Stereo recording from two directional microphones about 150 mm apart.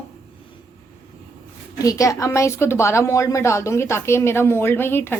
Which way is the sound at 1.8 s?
20° left (ahead or behind).